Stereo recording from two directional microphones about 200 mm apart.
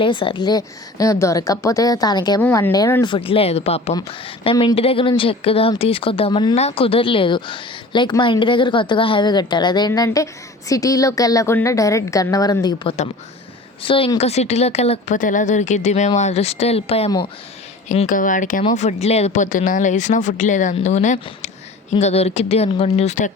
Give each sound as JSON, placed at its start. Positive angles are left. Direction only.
{"t": 0.0, "sound": "a woman's voice", "side_deg": 25}